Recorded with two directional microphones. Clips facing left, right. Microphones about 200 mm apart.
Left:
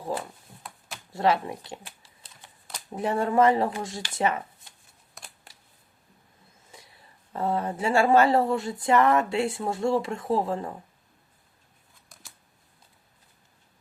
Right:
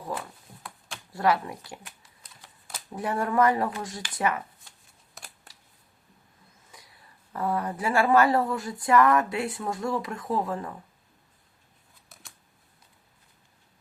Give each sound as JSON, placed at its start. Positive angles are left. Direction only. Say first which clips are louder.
{"t": 1.1, "sound": "typing", "louder": "left 1 dB", "side_deg": 25}
{"t": 2.9, "sound": "a woman's voice", "louder": "left 2 dB", "side_deg": 25}
{"t": 5.2, "sound": "a sound", "louder": "even", "side_deg": 0}
{"t": 6.7, "sound": "a woman's voice", "louder": "left 3 dB", "side_deg": 25}
{"t": 12.0, "sound": "scissors", "louder": "even", "side_deg": -5}